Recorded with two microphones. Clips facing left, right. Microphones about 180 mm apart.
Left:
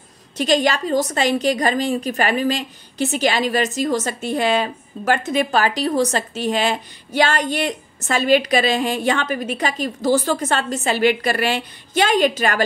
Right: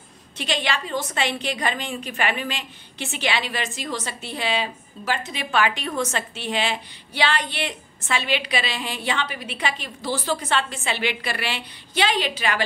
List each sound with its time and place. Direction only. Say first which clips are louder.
0.4 s a woman's voice: left 9 dB; 40° left (ahead or behind)